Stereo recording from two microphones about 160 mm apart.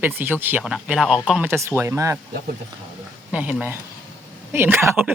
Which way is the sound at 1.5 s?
15° right (ahead or behind).